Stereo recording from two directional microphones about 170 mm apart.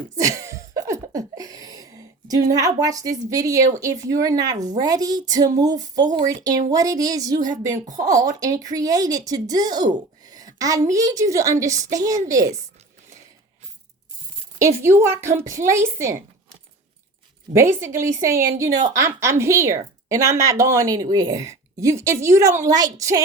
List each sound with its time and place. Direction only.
0.2 s a sound: 20° right (ahead or behind)
4.1 s speech: 20° right (ahead or behind)
14.6 s a woman's voice: 15° right (ahead or behind)
17.5 s a woman's voice: 15° right (ahead or behind)